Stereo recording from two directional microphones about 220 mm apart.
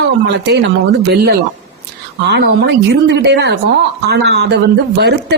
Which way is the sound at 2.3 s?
50° right (ahead or behind).